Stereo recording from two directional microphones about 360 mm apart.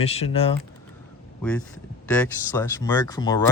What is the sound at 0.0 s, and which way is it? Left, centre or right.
Speech, centre.